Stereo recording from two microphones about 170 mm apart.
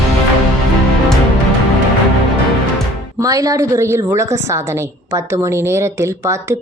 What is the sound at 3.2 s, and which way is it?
A woman's voice, 20° right (ahead or behind).